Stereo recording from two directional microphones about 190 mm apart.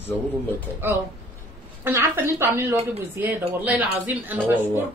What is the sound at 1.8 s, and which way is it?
A woman's voice, 10° right (ahead or behind).